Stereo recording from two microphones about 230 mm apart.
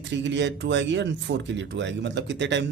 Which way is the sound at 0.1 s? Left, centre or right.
Right.